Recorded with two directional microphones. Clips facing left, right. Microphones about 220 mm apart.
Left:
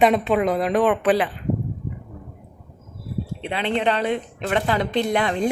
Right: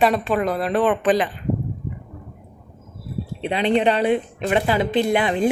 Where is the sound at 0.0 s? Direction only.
20° left (ahead or behind).